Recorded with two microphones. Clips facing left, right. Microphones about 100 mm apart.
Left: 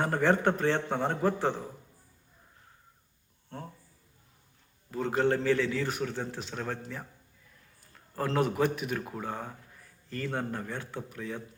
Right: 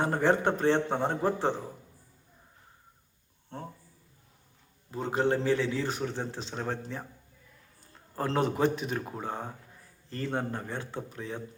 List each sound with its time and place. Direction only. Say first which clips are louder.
0.0 s a man's voice: even; 20° right (ahead or behind)
4.9 s a man's voice: left 1 dB; 20° right (ahead or behind)